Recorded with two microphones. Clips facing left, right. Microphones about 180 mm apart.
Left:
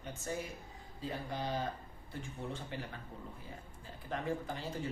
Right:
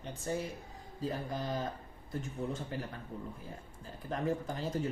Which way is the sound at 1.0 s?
45° right (ahead or behind).